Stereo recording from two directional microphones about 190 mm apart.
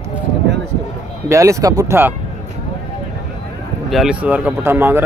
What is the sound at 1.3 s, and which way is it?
Speech, 15° right (ahead or behind).